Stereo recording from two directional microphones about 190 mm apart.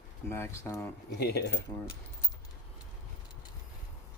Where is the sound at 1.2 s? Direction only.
55° left (ahead or behind).